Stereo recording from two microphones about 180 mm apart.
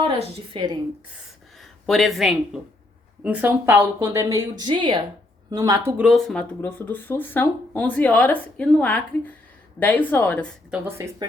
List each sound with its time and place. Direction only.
0.0 s a woman's voice: 30° right (ahead or behind)
1.9 s a woman's voice: centre (ahead or behind); by 5.8 s 20° right (ahead or behind)
5.9 s speech: 5° right (ahead or behind)
10.7 s a woman's voice: 15° right (ahead or behind)